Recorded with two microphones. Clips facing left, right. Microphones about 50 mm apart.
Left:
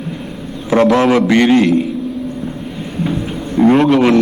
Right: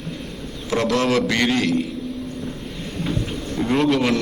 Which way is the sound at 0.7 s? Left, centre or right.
Left.